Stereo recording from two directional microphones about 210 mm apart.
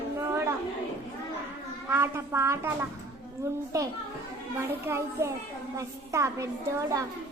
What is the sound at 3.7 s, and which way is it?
A woman's voice, 15° right (ahead or behind).